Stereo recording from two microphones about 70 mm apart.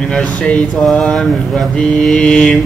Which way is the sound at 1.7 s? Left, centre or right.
Centre.